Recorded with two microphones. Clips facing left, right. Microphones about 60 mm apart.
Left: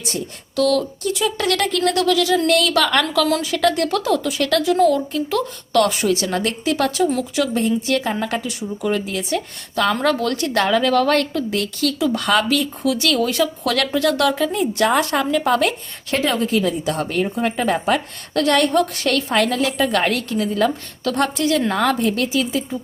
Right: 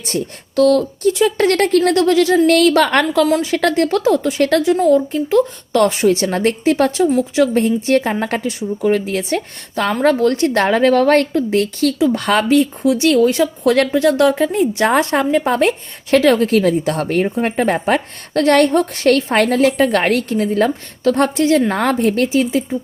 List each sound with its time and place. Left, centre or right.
0.0 s speech: right
16.3 s a woman's voice: right